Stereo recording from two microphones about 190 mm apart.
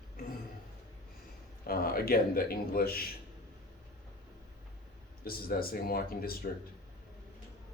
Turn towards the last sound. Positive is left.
turn(degrees=50)  # may be behind; listen again after turning